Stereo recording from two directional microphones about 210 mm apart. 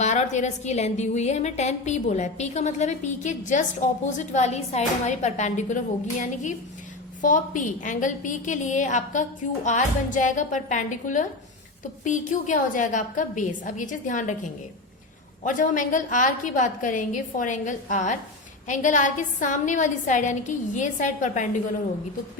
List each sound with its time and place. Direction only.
0.0 s a woman's voice: 35° left (ahead or behind)